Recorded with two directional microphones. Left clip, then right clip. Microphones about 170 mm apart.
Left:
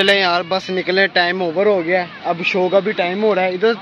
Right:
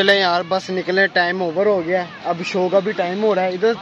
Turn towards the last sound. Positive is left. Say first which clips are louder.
# left 2 dB
turn(degrees=10)  # may be behind; listen again after turning